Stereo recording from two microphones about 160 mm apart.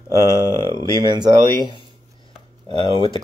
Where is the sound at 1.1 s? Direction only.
25° right (ahead or behind).